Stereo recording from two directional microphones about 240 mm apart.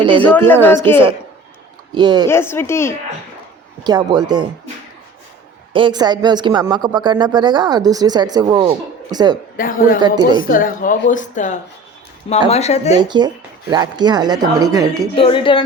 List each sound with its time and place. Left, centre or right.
0.2 s speech: centre
2.0 s speech: centre
2.2 s speech: centre
3.8 s speech: centre
5.7 s speech: centre
9.6 s a woman's voice: left
10.0 s speech: centre
10.4 s a woman's voice: left
13.0 s speech: centre
15.1 s speech: left